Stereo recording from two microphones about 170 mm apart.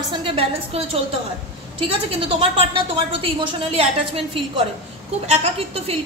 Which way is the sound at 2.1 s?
35° right (ahead or behind).